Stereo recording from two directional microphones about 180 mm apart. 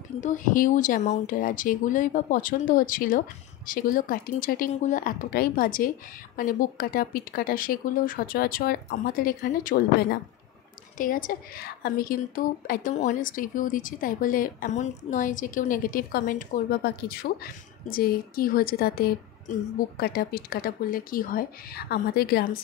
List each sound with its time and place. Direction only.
0.2 s speech: 45° left (ahead or behind)
11.0 s speech: 50° left (ahead or behind)